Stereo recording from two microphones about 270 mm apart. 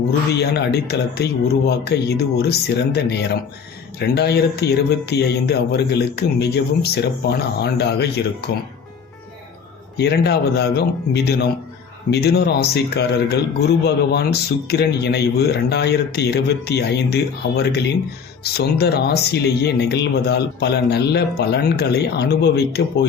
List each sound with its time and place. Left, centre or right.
0.3 s speech: left
10.0 s speech: left